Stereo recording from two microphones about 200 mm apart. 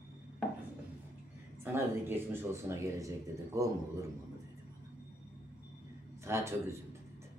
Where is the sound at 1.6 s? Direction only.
10° right (ahead or behind).